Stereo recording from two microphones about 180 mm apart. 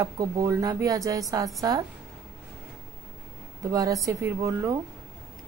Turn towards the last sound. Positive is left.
turn(degrees=-15)  # may be behind; listen again after turning